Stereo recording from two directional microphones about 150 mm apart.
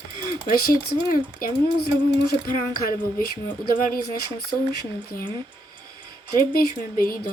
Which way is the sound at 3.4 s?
65° left (ahead or behind).